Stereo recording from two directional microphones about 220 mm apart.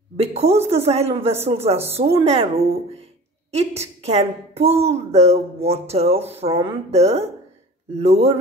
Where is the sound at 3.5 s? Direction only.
30° right (ahead or behind).